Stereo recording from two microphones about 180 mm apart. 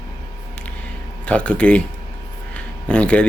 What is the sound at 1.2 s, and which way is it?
Speech, 5° left (ahead or behind).